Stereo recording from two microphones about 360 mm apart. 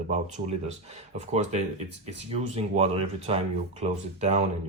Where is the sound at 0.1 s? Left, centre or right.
Centre.